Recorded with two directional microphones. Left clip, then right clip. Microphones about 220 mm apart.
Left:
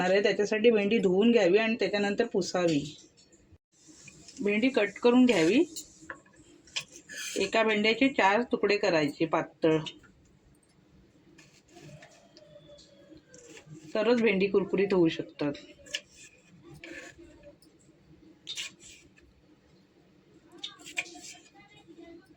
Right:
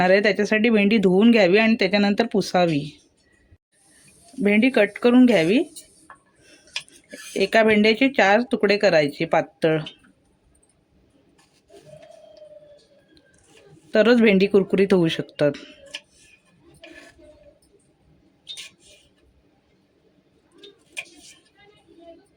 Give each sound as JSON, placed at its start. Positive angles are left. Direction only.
{"t": 0.0, "sound": "speech", "side_deg": -35}
{"t": 4.4, "sound": "speech", "side_deg": -40}
{"t": 7.3, "sound": "speech", "side_deg": -40}
{"t": 13.9, "sound": "speech", "side_deg": -45}